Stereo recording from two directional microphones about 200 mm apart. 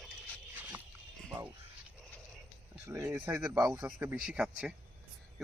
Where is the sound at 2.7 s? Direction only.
15° right (ahead or behind).